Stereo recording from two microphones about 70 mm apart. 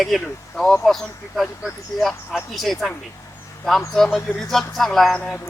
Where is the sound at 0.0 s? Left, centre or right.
Centre.